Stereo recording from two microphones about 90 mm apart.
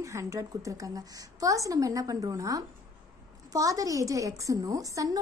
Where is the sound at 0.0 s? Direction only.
35° right (ahead or behind).